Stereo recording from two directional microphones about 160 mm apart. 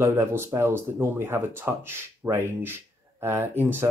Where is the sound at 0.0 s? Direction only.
15° right (ahead or behind).